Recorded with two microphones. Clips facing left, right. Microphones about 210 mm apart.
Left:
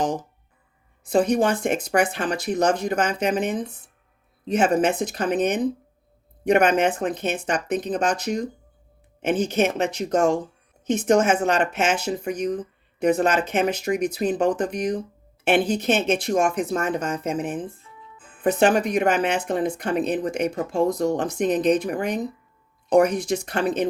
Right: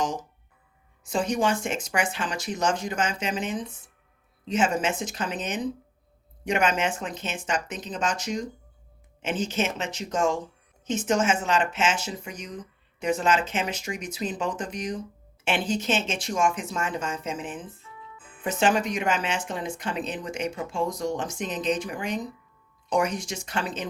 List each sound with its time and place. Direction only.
0.0 s speech: 60° left (ahead or behind)